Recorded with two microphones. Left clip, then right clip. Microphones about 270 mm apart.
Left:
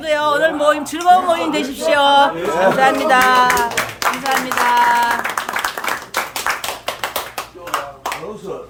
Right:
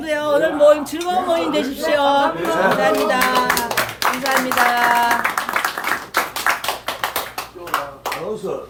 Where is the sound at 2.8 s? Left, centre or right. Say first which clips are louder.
Left 4 dB; centre.